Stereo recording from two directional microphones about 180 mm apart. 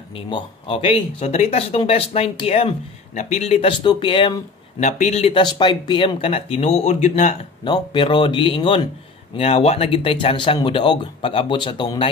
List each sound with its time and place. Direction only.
0.1 s speech: 30° left (ahead or behind)
7.6 s speech: 25° left (ahead or behind)